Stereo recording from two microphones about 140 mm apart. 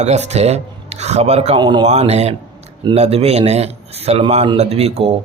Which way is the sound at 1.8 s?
50° right (ahead or behind).